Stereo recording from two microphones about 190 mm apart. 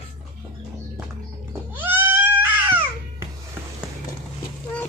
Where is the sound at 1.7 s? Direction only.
10° right (ahead or behind).